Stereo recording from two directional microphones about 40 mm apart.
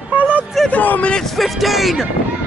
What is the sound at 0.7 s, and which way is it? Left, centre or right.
Speech, left.